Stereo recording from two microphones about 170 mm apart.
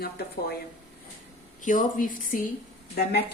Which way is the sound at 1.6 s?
50° left (ahead or behind).